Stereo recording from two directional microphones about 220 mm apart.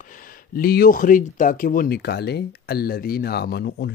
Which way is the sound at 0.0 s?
40° left (ahead or behind).